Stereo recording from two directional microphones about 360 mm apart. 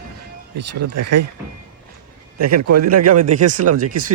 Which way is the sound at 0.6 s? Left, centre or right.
Right.